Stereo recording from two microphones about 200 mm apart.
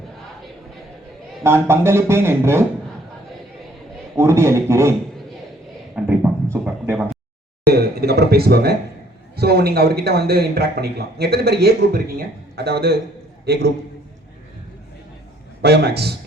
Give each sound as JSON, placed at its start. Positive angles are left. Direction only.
{"t": 1.5, "sound": "speech", "side_deg": -10}
{"t": 4.2, "sound": "speech", "side_deg": -15}
{"t": 6.1, "sound": "a sound", "side_deg": -10}
{"t": 7.7, "sound": "a sound", "side_deg": -50}
{"t": 9.3, "sound": "a man's voice", "side_deg": -50}
{"t": 15.6, "sound": "a man's voice", "side_deg": -55}